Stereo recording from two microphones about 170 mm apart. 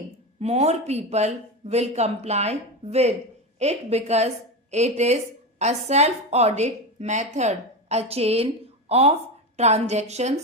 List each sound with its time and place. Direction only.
0.3 s a woman's voice: 40° right (ahead or behind)